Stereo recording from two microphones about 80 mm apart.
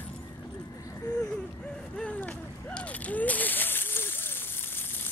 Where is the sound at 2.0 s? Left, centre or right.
Centre.